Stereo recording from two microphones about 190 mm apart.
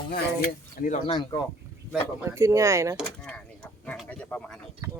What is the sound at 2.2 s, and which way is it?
Speech, 15° right (ahead or behind).